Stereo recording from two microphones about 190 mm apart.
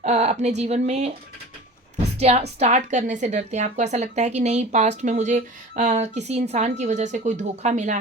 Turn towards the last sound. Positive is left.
turn(degrees=-40)  # may be behind; listen again after turning